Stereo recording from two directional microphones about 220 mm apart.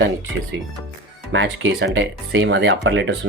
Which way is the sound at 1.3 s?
60° right (ahead or behind).